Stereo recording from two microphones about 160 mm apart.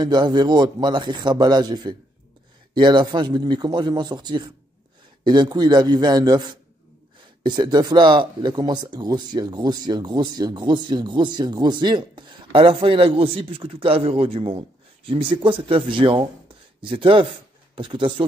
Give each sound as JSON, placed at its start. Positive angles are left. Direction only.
{"t": 0.0, "sound": "speech", "side_deg": -25}